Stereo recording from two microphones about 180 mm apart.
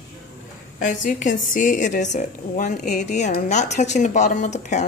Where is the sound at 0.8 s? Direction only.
45° left (ahead or behind).